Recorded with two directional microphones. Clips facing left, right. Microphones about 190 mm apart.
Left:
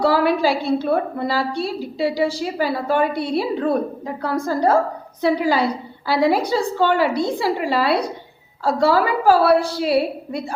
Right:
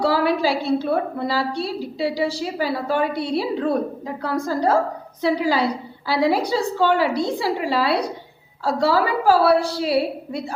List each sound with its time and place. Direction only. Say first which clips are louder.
0.0 s a woman's voice: left 2 dB; 50° left (ahead or behind)